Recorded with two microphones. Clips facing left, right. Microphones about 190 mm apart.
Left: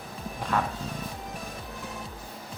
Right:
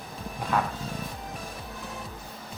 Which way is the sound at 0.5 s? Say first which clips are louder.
Right 1 dB; 5° right (ahead or behind).